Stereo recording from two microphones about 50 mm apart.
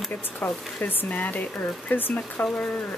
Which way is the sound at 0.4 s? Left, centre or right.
Left.